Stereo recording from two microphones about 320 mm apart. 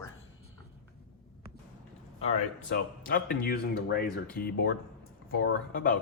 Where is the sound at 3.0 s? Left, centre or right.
Left.